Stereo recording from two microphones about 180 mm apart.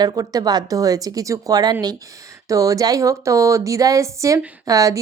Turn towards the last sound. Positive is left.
turn(degrees=-20)  # may be behind; listen again after turning